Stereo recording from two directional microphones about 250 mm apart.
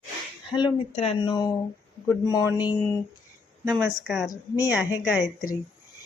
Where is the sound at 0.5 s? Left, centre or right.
Left.